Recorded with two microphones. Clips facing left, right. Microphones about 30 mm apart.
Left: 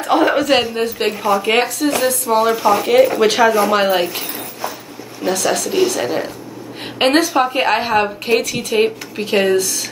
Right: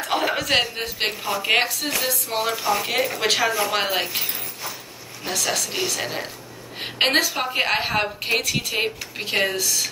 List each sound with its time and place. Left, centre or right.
0.1 s a woman's voice: centre